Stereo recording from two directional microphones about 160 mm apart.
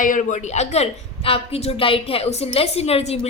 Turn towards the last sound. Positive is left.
turn(degrees=40)  # may be behind; listen again after turning